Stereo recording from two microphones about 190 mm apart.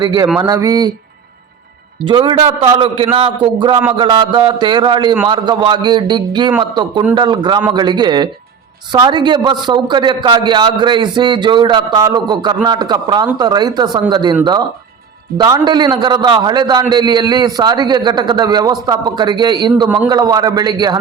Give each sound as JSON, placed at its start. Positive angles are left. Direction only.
{"t": 0.0, "sound": "a man's voice", "side_deg": -20}
{"t": 2.0, "sound": "a man's voice", "side_deg": -25}
{"t": 15.4, "sound": "a man's voice", "side_deg": -20}